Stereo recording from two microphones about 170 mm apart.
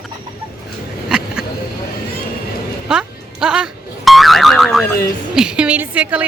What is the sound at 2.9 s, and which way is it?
Music, 5° right (ahead or behind).